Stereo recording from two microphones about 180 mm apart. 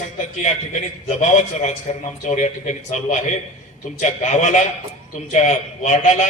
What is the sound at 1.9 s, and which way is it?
A man's voice, 40° left (ahead or behind).